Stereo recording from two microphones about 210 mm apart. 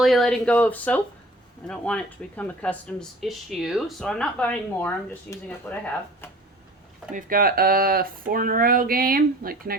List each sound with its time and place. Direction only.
0.0 s speech: centre (ahead or behind)
7.1 s speech: 40° right (ahead or behind)